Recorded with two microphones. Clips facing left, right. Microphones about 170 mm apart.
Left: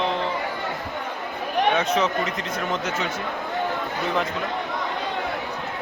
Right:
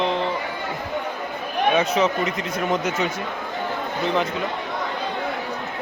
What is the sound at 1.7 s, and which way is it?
Speech, centre (ahead or behind).